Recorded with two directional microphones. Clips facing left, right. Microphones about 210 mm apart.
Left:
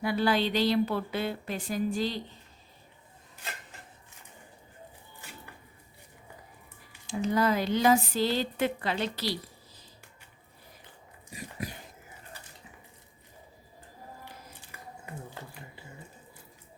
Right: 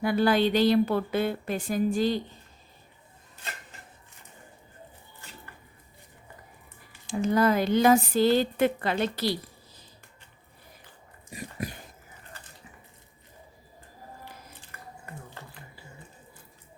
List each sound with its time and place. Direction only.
0.0 s speech: 50° right (ahead or behind)
7.1 s speech: 50° right (ahead or behind)